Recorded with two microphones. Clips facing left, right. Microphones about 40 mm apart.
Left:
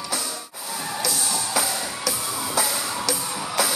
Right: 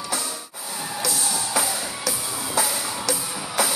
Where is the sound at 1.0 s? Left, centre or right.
Centre.